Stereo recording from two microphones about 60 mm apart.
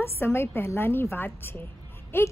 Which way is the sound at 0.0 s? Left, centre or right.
Left.